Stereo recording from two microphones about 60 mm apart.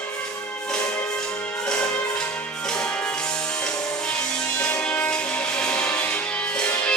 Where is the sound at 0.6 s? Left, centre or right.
Centre.